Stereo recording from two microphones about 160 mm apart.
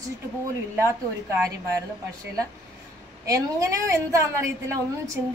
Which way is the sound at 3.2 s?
20° right (ahead or behind).